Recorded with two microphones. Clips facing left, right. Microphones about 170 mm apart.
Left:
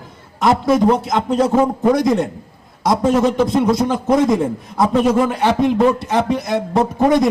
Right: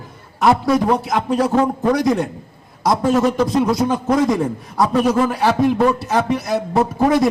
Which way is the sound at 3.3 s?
Centre (ahead or behind).